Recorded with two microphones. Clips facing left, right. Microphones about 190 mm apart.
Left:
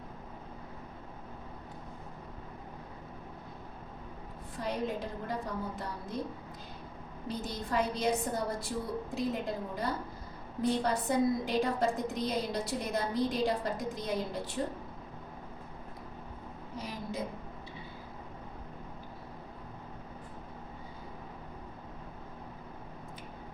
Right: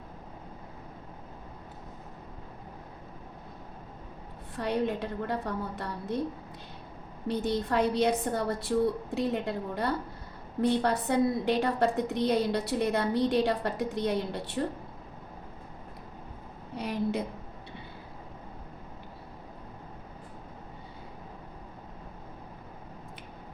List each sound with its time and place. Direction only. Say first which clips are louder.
4.5 s a woman's voice: right 5 dB; 65° right (ahead or behind)
7.3 s a woman's voice: right 7 dB; 65° right (ahead or behind)
16.7 s a sound: right 8 dB; 65° right (ahead or behind)